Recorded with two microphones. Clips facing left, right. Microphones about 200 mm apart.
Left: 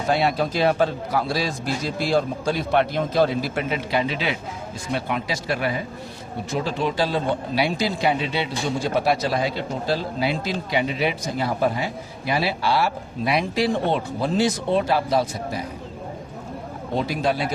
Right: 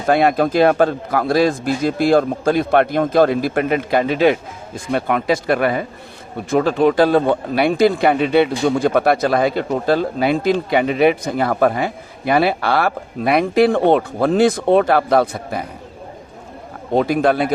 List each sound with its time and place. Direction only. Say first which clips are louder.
0.0 s a man's voice: right 6 dB; 55° right (ahead or behind)
16.9 s speech: right 8 dB; 55° right (ahead or behind)